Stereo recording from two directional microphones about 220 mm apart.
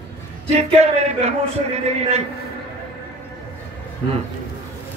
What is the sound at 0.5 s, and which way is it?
Speech, 30° right (ahead or behind).